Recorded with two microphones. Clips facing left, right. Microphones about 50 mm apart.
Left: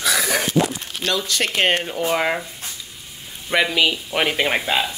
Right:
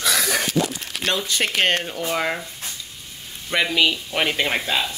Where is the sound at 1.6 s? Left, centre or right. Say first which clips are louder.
Left 3 dB; centre.